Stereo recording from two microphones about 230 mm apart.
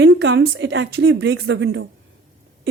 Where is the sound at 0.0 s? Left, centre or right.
Right.